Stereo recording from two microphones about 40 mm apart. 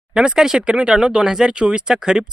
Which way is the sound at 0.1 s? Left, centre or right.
Centre.